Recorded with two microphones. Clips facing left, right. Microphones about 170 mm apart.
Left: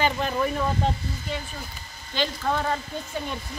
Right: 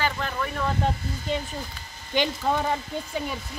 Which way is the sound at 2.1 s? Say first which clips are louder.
Right 2 dB; 15° right (ahead or behind).